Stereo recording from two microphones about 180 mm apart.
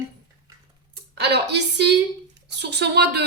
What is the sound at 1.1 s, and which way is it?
Music, 65° right (ahead or behind).